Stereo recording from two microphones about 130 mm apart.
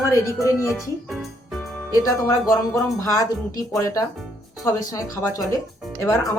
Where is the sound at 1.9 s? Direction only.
25° left (ahead or behind).